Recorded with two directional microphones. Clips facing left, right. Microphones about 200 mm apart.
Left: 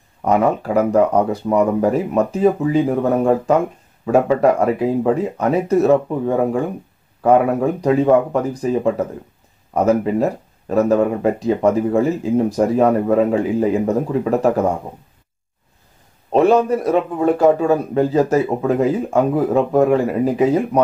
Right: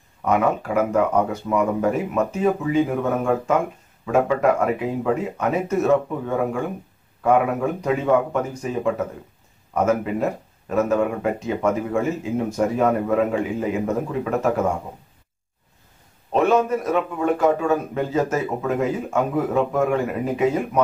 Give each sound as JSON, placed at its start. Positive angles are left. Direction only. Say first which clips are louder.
{"t": 0.2, "sound": "speech", "louder": "left 4 dB", "side_deg": 35}
{"t": 7.8, "sound": "speech", "louder": "left 6 dB", "side_deg": 35}
{"t": 16.3, "sound": "speech", "louder": "left 5 dB", "side_deg": 35}